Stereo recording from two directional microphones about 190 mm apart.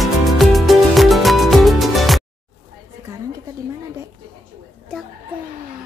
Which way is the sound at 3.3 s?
15° right (ahead or behind).